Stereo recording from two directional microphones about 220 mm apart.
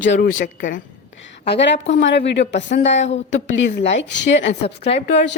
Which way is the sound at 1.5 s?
50° left (ahead or behind).